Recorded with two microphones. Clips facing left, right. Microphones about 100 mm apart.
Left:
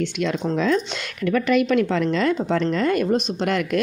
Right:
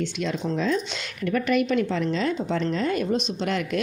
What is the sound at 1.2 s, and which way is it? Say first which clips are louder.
A woman's voice: left 4 dB; 90° left.